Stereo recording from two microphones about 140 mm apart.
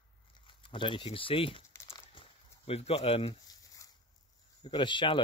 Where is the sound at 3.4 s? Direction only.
25° left (ahead or behind).